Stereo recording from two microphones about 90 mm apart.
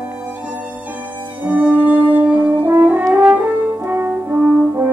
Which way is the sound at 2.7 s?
25° right (ahead or behind).